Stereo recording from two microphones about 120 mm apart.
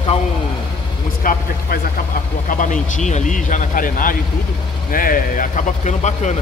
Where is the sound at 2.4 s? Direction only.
90° left.